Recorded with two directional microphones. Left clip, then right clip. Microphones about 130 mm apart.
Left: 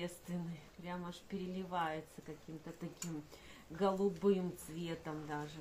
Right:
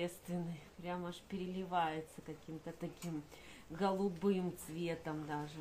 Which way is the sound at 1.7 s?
25° right (ahead or behind).